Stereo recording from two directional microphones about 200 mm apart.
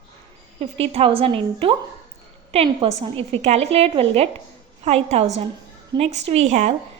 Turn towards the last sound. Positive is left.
turn(degrees=-35)  # may be behind; listen again after turning